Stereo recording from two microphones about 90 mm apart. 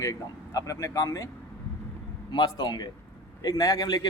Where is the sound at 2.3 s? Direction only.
55° left (ahead or behind).